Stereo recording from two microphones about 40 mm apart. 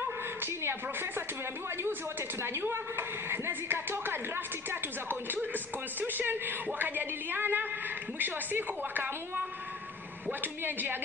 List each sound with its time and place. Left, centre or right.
0.4 s speech: right
2.4 s a woman's voice: right
4.6 s speech: right
10.4 s speech: right